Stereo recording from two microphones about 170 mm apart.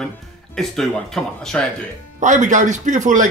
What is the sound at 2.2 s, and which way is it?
Speech, 45° right (ahead or behind).